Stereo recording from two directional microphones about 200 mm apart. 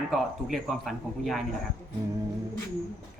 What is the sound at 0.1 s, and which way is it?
Speech, centre (ahead or behind).